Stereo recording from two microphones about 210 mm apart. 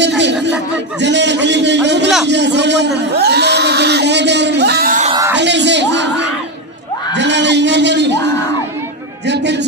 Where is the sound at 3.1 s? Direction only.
50° right (ahead or behind).